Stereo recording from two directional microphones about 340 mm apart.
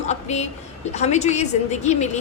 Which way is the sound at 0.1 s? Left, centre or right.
Centre.